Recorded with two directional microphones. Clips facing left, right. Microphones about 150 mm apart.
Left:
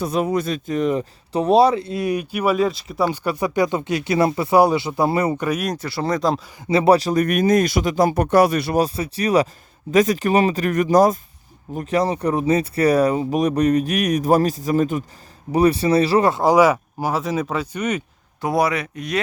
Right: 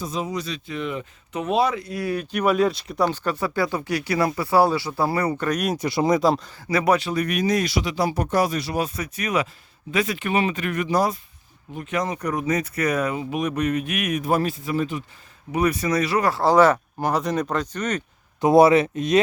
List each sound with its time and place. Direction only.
0.0 s speech: 60° left (ahead or behind); by 2.2 s 20° left (ahead or behind)
2.3 s speech: 5° left (ahead or behind); by 5.5 s 20° left (ahead or behind)
5.5 s speech: centre (ahead or behind)
5.7 s speech: 15° right (ahead or behind)
6.7 s speech: 25° left (ahead or behind); by 8.7 s 65° left (ahead or behind)
8.7 s speech: 35° left (ahead or behind)
15.5 s speech: 30° left (ahead or behind); by 18.0 s 10° left (ahead or behind)
18.3 s speech: 25° right (ahead or behind)